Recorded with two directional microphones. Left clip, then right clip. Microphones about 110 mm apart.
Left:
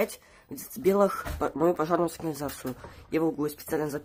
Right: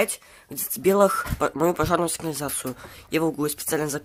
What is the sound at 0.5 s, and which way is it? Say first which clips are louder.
Speech: right 4 dB; 15° right (ahead or behind).